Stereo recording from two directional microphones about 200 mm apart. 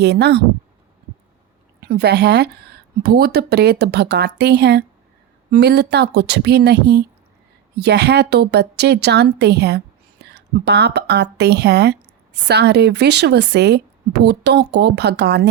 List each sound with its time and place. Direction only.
0.0 s speech: 55° right (ahead or behind)
1.8 s a woman's voice: 55° right (ahead or behind)